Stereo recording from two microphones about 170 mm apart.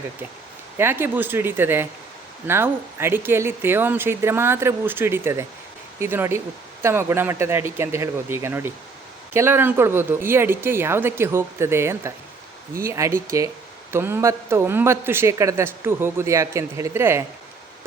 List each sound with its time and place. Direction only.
0.8 s speech: 15° right (ahead or behind)